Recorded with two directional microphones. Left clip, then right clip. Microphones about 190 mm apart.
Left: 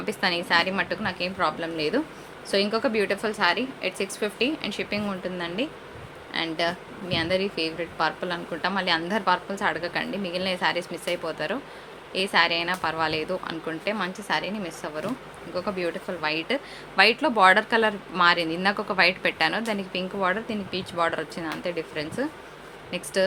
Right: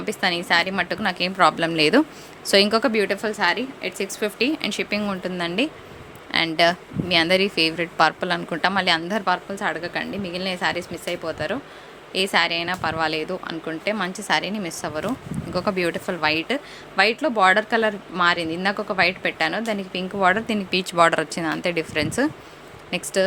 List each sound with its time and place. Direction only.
0.0 s speech: 15° right (ahead or behind)
17.0 s speech: 10° right (ahead or behind)
20.2 s speech: 35° right (ahead or behind)
22.9 s speech: 25° right (ahead or behind)